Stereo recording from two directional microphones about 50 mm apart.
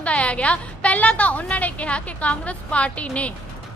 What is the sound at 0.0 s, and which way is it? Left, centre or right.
A woman's voice, left.